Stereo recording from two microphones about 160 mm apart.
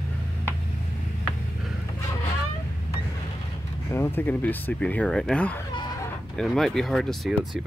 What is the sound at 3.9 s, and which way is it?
Speech, 15° left (ahead or behind).